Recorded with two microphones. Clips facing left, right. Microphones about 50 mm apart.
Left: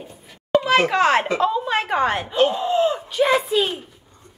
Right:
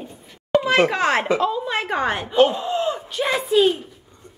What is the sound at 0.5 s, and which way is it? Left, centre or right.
A woman's voice, centre.